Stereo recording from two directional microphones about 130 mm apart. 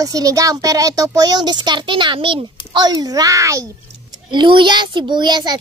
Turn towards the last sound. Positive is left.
turn(degrees=-35)  # may be behind; listen again after turning